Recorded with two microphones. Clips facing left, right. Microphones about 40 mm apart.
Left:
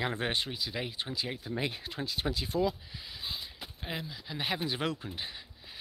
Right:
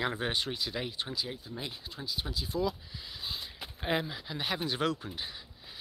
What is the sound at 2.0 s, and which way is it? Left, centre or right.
Speech, left.